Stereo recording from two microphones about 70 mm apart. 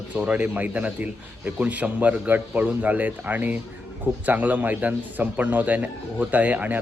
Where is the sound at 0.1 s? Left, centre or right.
Right.